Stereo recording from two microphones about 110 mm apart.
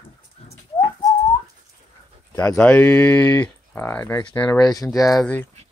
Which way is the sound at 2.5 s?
15° left (ahead or behind).